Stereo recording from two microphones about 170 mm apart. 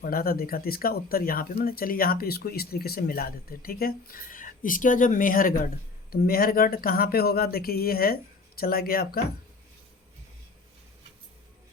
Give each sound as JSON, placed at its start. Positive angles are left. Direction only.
{"t": 0.0, "sound": "speech", "side_deg": 60}